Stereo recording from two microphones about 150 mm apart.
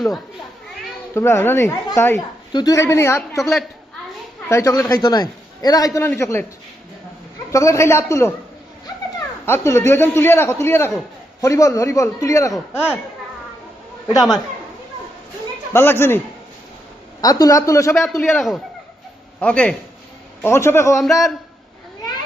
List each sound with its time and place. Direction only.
1.1 s a man's voice: 15° left (ahead or behind)
7.5 s a man's voice: 20° left (ahead or behind)
9.5 s a man's voice: 20° left (ahead or behind)
15.7 s a man's voice: 15° left (ahead or behind)
18.3 s a man's voice: centre (ahead or behind); by 21.0 s 20° left (ahead or behind)
21.0 s a man's voice: centre (ahead or behind)